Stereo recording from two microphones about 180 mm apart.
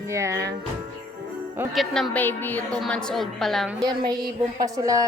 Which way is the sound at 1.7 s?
Centre (ahead or behind).